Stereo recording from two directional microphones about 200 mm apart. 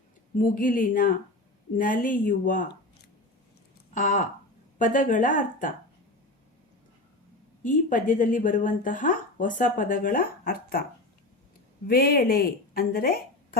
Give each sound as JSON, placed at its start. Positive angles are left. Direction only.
{"t": 0.5, "sound": "speech", "side_deg": 45}
{"t": 3.9, "sound": "speech", "side_deg": 40}
{"t": 7.6, "sound": "speech", "side_deg": 40}
{"t": 11.9, "sound": "speech", "side_deg": 50}